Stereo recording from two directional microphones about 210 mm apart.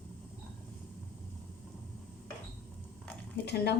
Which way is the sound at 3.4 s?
55° left (ahead or behind).